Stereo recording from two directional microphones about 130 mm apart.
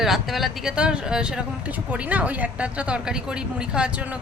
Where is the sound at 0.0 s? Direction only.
Centre (ahead or behind).